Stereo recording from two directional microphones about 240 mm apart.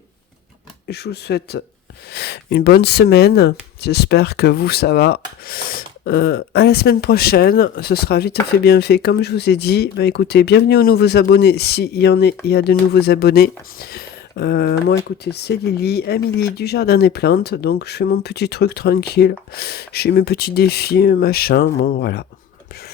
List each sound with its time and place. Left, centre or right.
0.9 s speech: left